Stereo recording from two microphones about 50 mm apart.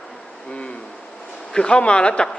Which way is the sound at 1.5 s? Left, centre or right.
Centre.